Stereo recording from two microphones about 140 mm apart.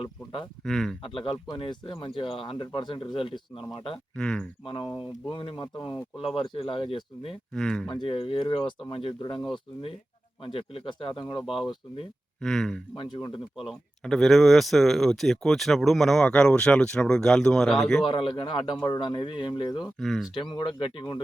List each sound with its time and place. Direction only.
0.6 s speech: 5° left (ahead or behind)
1.0 s speech: 35° left (ahead or behind)
4.1 s speech: 5° left (ahead or behind)
4.6 s speech: 35° left (ahead or behind)
7.5 s speech: 5° left (ahead or behind)
7.9 s speech: 35° left (ahead or behind)
10.4 s speech: 40° left (ahead or behind)
12.4 s speech: 5° left (ahead or behind)
13.0 s speech: 35° left (ahead or behind)
13.6 s speech: centre (ahead or behind)
18.0 s speech: 40° left (ahead or behind)
19.8 s speech: centre (ahead or behind)
20.3 s speech: 30° left (ahead or behind)